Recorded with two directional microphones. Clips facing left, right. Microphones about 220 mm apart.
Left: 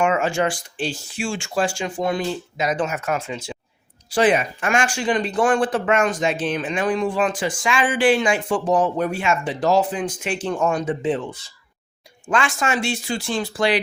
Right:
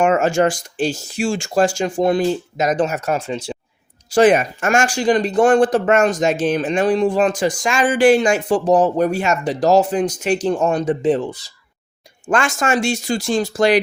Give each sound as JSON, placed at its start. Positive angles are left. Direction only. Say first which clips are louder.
{"t": 0.0, "sound": "speech", "louder": "right 5 dB", "side_deg": -45}
{"t": 4.1, "sound": "speech", "louder": "right 5 dB", "side_deg": -45}